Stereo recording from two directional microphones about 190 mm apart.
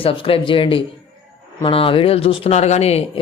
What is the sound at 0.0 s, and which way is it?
Speech, 30° left (ahead or behind).